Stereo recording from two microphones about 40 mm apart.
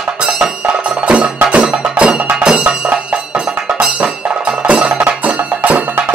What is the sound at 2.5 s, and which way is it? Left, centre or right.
Music, right.